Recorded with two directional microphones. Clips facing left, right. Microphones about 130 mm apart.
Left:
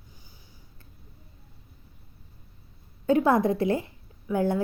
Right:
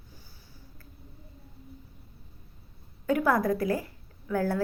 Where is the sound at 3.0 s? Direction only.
25° left (ahead or behind).